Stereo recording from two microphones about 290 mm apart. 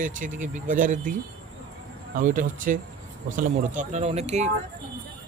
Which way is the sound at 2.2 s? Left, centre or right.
Right.